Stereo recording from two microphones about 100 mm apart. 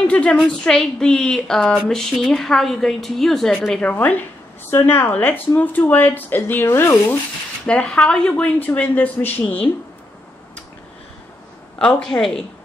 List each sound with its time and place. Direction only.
0.0 s a woman's voice: 10° left (ahead or behind)
3.8 s speech: 15° left (ahead or behind)
7.6 s speech: 10° left (ahead or behind)
11.8 s a woman's voice: 5° left (ahead or behind)